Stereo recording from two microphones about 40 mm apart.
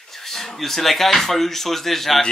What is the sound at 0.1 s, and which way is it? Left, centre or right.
Speech, centre.